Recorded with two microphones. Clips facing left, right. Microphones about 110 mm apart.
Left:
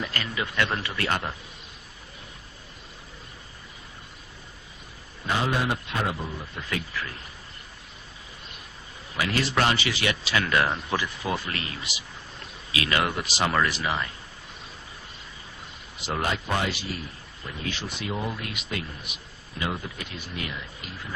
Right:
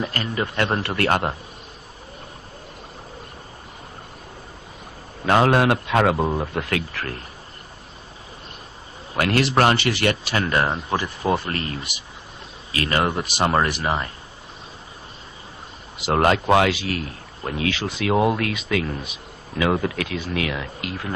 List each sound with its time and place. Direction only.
0.1 s speech: 40° right (ahead or behind)
0.8 s speech: 55° right (ahead or behind)
5.2 s a man's voice: 90° right; by 7.2 s 70° right (ahead or behind)
9.1 s speech: 55° right (ahead or behind)
9.6 s speech: 55° right (ahead or behind)
10.3 s speech: 35° right (ahead or behind)
11.0 s speech: 50° right (ahead or behind)
16.1 s a man's voice: 65° right (ahead or behind); by 17.1 s 90° right
17.4 s speech: 65° right (ahead or behind)